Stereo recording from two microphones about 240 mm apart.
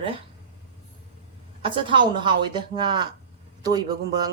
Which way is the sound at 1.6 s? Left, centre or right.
Right.